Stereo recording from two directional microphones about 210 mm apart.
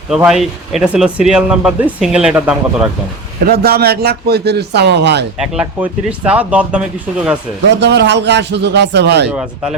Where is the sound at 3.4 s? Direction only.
45° right (ahead or behind).